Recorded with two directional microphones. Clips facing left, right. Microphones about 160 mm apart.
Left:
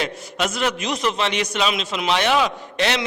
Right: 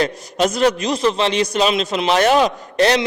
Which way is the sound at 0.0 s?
40° right (ahead or behind).